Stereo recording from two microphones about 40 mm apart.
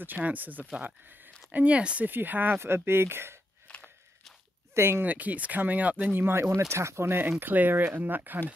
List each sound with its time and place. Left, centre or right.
0.0 s speech: right
1.5 s speech: right
2.0 s speech: right
2.6 s speech: right
3.7 s walk: left
4.7 s speech: right
5.0 s speech: right
6.1 s speech: right